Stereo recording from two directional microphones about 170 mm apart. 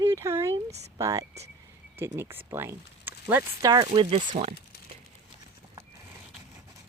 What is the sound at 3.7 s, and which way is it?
Speech, 25° right (ahead or behind).